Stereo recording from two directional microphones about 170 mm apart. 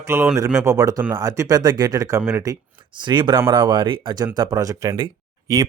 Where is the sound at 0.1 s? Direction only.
15° right (ahead or behind).